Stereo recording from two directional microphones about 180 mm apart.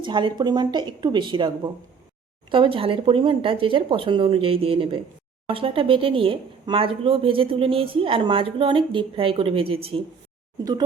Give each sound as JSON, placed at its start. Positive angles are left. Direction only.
{"t": 0.0, "sound": "speech", "side_deg": -25}
{"t": 10.6, "sound": "speech", "side_deg": -20}